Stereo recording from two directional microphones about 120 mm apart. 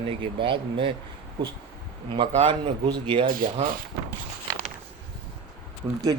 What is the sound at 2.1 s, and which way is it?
A man's voice, 45° right (ahead or behind).